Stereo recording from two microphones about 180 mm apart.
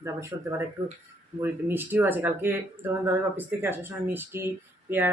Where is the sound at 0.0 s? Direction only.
15° right (ahead or behind).